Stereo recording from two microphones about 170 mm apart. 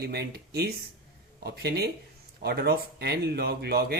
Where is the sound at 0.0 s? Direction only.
70° right (ahead or behind).